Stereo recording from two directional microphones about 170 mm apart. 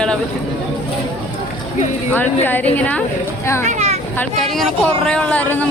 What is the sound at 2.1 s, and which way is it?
Speech, 10° left (ahead or behind).